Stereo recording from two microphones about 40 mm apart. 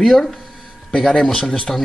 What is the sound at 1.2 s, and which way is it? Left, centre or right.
Speech, centre.